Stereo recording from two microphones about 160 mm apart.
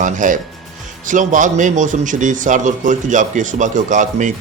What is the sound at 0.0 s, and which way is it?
A man's voice, 55° right (ahead or behind).